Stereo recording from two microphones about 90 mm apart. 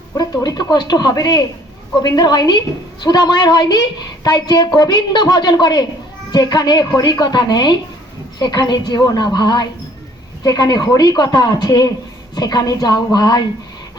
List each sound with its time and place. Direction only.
0.2 s a woman's voice: 45° left (ahead or behind)